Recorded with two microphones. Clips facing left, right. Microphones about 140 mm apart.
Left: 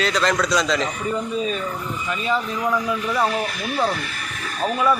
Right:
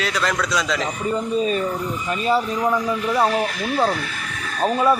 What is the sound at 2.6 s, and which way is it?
Speech, 20° right (ahead or behind).